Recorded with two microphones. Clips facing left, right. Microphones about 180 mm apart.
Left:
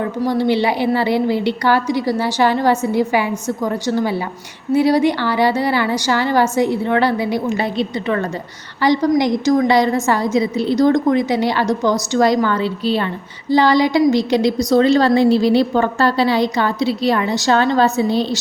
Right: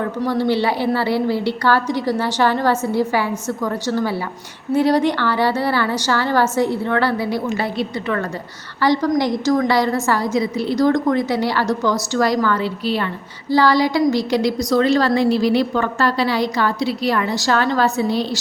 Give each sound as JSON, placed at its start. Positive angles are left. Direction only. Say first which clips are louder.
{"t": 0.0, "sound": "a woman's voice", "louder": "left 2 dB", "side_deg": 15}